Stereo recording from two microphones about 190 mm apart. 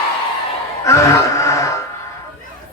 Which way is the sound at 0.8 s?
15° left (ahead or behind).